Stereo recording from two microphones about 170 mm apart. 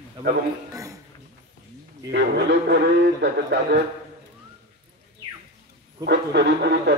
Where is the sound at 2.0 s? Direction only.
75° right (ahead or behind).